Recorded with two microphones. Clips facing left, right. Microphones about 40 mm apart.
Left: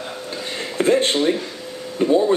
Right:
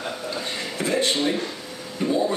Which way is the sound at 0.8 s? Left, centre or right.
Left.